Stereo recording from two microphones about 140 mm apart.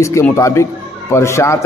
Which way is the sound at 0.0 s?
20° left (ahead or behind).